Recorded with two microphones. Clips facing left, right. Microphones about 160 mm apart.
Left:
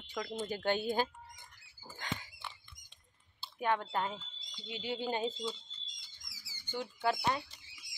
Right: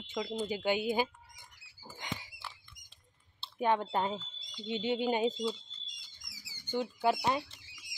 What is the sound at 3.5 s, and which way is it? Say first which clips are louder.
Speech: right 3 dB; 25° right (ahead or behind).